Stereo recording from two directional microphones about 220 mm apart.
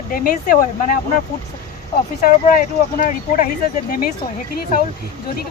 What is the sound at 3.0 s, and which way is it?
Speech, 40° left (ahead or behind).